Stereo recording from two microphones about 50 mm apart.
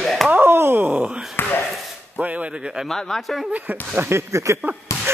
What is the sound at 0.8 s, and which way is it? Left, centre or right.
Groan, right.